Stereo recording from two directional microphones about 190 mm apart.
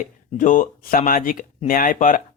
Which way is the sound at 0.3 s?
45° left (ahead or behind).